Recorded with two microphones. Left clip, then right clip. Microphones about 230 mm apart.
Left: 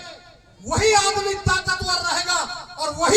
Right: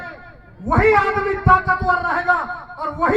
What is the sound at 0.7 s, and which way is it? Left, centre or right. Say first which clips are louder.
Music: right 3 dB; left.